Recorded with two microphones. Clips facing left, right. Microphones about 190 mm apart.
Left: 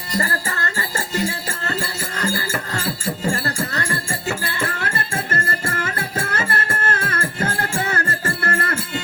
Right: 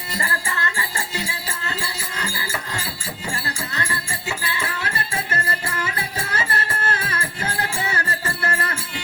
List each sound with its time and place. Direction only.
0.1 s music: 40° left (ahead or behind)